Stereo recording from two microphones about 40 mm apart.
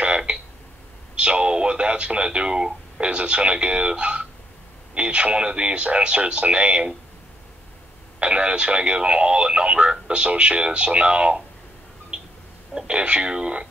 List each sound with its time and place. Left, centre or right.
1.1 s speech: right
8.2 s speech: right
12.8 s speech: right